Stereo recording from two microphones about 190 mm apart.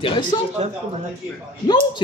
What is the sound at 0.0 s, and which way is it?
Speech, 25° left (ahead or behind).